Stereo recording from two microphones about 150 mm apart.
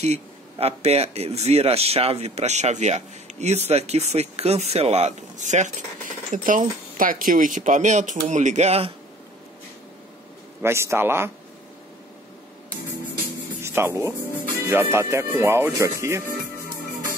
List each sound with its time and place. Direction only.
0.0 s speech: 45° right (ahead or behind)
10.6 s speech: 20° right (ahead or behind)
13.6 s speech: 15° right (ahead or behind)